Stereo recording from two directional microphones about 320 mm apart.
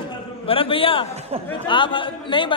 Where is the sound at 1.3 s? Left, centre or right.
Centre.